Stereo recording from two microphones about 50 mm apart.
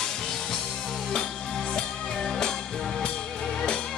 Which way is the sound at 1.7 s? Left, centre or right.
Centre.